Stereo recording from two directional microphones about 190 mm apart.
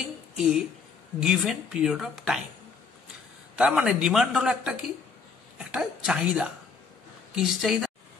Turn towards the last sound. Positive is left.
turn(degrees=0)  # may be behind; listen again after turning